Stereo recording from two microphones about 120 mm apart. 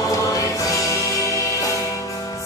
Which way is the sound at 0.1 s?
30° left (ahead or behind).